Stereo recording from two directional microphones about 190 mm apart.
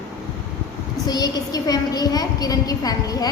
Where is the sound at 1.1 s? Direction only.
20° left (ahead or behind).